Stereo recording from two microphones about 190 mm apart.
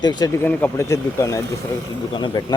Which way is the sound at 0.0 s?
20° left (ahead or behind).